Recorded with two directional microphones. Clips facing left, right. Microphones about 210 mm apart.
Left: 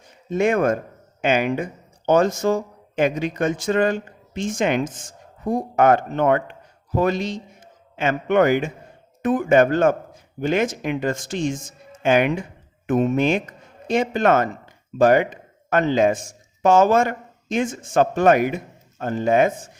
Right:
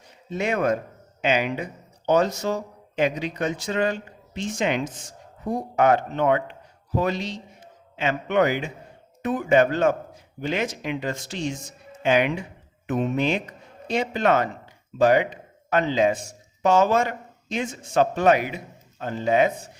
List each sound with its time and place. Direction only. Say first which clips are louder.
0.3 s speech: left 5 dB; 50° left (ahead or behind)